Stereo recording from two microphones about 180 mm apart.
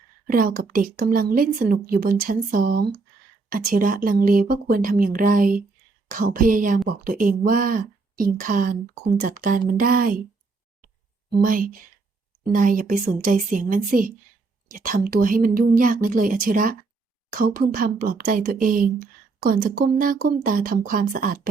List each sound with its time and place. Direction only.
0.3 s speech: 50° right (ahead or behind)
11.3 s speech: 50° right (ahead or behind)